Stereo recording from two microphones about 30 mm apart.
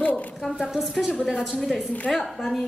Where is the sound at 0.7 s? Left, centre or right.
Centre.